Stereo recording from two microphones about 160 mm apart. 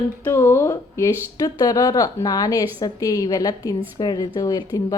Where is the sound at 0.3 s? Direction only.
15° left (ahead or behind).